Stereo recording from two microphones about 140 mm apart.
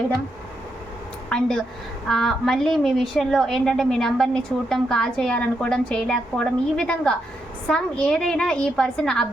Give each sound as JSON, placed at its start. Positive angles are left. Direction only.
{"t": 1.3, "sound": "a woman's voice", "side_deg": 5}